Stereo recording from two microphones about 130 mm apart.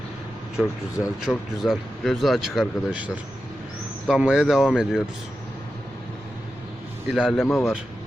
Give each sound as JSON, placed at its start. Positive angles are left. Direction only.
{"t": 0.6, "sound": "speech", "side_deg": 0}
{"t": 7.1, "sound": "speech", "side_deg": 0}
{"t": 7.4, "sound": "speech", "side_deg": 20}